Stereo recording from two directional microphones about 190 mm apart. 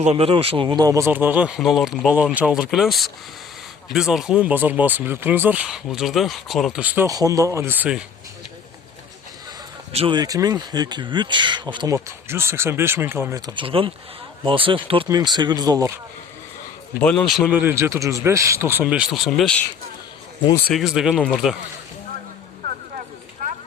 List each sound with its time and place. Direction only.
0.0 s speech: 30° right (ahead or behind); by 8.0 s 5° right (ahead or behind)
9.9 s speech: 30° right (ahead or behind)
17.0 s speech: 5° left (ahead or behind)
20.7 s speech: centre (ahead or behind)
23.4 s clip-clop: 45° right (ahead or behind)